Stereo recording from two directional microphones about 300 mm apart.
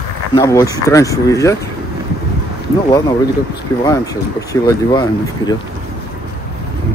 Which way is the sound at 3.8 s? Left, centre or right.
Centre.